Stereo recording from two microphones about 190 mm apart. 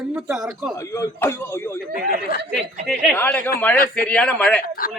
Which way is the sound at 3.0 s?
5° left (ahead or behind).